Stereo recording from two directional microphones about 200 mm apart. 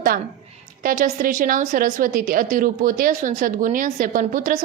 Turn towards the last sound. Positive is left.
turn(degrees=-40)  # may be behind; listen again after turning